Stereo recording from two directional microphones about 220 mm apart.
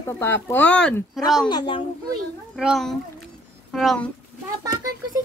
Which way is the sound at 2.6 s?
Centre (ahead or behind).